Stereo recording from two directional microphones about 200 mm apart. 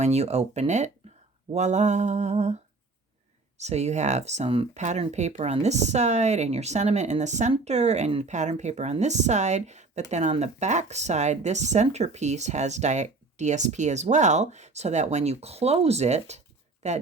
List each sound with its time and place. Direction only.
0.0 s speech: 35° right (ahead or behind)
3.6 s speech: 35° right (ahead or behind)